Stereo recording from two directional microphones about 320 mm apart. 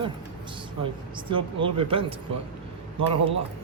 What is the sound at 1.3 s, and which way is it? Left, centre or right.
Speech, centre.